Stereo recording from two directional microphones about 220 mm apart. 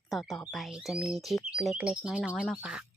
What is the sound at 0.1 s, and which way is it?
Speech, centre (ahead or behind).